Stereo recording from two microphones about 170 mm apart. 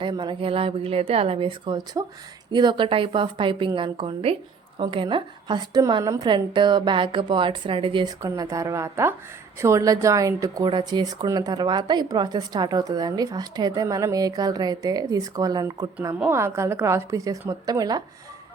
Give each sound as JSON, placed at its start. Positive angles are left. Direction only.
{"t": 0.0, "sound": "a woman's voice", "side_deg": -30}
{"t": 8.2, "sound": "a woman's voice", "side_deg": -20}